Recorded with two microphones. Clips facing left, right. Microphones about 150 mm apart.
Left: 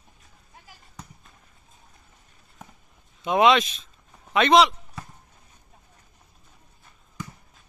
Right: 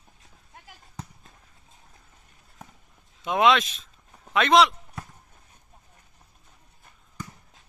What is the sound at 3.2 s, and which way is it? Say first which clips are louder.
Speech: left 2 dB; centre (ahead or behind).